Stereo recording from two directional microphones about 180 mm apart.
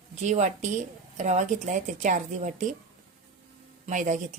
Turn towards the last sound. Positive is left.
turn(degrees=-45)  # may be behind; listen again after turning